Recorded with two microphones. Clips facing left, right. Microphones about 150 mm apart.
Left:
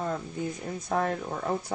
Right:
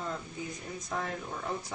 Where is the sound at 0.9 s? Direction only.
55° left (ahead or behind).